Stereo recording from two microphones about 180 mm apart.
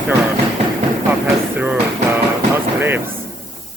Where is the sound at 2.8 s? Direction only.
10° right (ahead or behind).